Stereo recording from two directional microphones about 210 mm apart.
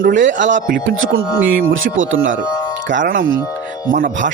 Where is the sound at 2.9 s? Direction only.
40° right (ahead or behind).